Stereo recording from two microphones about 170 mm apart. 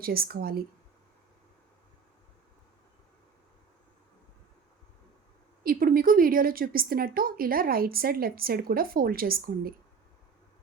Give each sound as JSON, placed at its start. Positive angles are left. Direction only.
{"t": 0.0, "sound": "a woman's voice", "side_deg": -60}
{"t": 5.6, "sound": "a woman's voice", "side_deg": -60}